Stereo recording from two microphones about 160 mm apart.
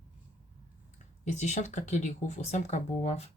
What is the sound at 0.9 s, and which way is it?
Speech, 45° left (ahead or behind).